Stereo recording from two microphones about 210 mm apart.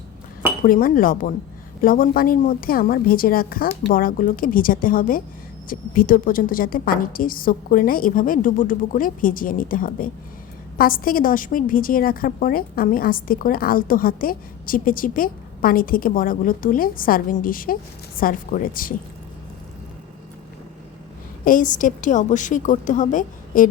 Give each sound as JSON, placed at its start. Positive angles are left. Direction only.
{"t": 0.6, "sound": "a woman's voice", "side_deg": 40}
{"t": 21.4, "sound": "a woman's voice", "side_deg": 40}